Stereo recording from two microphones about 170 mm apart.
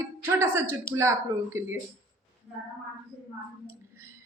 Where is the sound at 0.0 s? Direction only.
15° right (ahead or behind).